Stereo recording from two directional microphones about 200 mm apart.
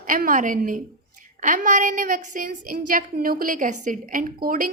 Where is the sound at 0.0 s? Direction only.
40° right (ahead or behind).